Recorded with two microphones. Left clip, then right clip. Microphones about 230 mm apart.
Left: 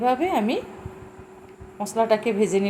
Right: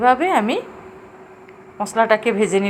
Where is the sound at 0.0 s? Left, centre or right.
Centre.